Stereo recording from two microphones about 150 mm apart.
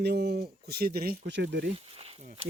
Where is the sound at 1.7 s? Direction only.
40° right (ahead or behind).